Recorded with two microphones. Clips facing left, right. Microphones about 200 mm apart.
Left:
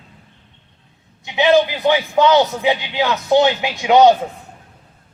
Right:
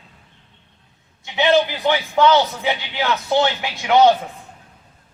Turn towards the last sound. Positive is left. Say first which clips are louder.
# left 3 dB
turn(degrees=20)  # may be behind; listen again after turning